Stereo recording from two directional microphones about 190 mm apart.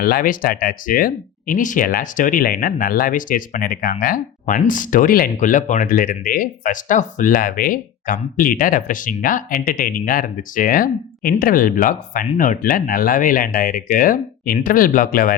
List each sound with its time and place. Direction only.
0.0 s speech: 50° left (ahead or behind)